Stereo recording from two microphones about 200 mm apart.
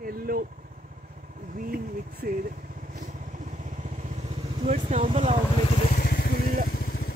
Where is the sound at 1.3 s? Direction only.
45° right (ahead or behind).